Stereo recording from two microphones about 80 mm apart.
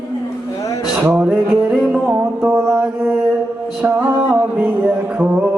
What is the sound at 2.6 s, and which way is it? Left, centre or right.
Mantra, centre.